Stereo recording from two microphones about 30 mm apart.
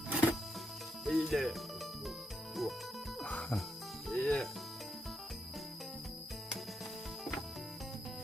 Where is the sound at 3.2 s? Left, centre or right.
Left.